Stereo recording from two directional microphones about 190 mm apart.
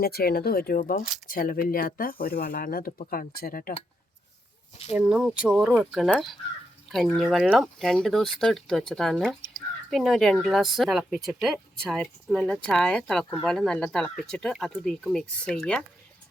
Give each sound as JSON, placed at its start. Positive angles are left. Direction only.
{"t": 0.0, "sound": "speech", "side_deg": 55}
{"t": 4.9, "sound": "speech", "side_deg": -5}